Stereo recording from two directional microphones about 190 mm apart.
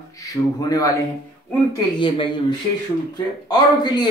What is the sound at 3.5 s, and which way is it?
Speech, 20° left (ahead or behind).